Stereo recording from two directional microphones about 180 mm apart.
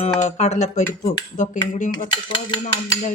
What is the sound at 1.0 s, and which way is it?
Speech, 45° left (ahead or behind).